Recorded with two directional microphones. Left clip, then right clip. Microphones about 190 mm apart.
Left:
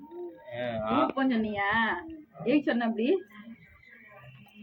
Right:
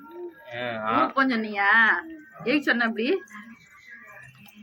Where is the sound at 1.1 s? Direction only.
5° right (ahead or behind).